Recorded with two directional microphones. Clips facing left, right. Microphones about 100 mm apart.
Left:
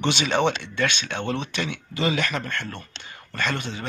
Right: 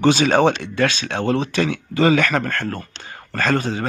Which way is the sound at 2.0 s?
50° right (ahead or behind).